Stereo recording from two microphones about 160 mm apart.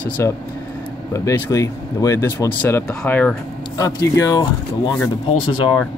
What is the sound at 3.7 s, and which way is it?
Speech, 20° left (ahead or behind).